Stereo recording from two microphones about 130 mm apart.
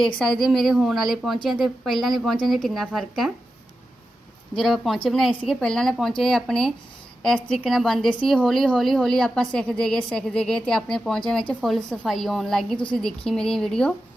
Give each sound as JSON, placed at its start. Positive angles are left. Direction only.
{"t": 0.0, "sound": "a woman's voice", "side_deg": 0}
{"t": 4.6, "sound": "a woman's voice", "side_deg": 0}